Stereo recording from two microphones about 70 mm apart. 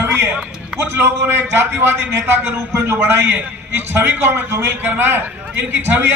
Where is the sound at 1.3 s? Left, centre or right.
Right.